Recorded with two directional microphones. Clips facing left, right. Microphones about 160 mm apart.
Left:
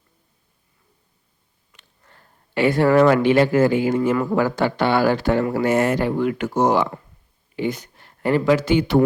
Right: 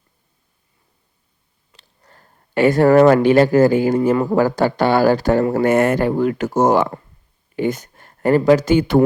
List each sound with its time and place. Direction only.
1.7 s speech: 40° right (ahead or behind)
5.7 s speech: 55° right (ahead or behind)